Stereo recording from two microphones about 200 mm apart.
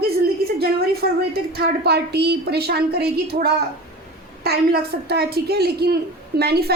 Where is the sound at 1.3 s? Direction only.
50° right (ahead or behind).